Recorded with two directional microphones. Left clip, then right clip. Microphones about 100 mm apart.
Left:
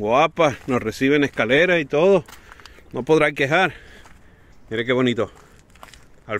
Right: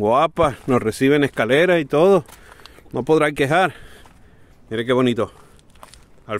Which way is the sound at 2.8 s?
55° right (ahead or behind).